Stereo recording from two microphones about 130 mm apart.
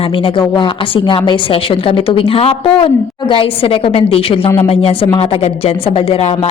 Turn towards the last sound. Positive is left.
turn(degrees=50)  # may be behind; listen again after turning